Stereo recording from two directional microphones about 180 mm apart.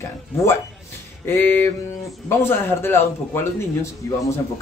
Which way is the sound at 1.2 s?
10° left (ahead or behind).